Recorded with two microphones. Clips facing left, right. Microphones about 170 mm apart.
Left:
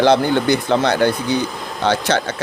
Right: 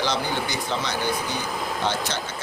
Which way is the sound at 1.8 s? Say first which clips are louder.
Left 12 dB; 75° left (ahead or behind).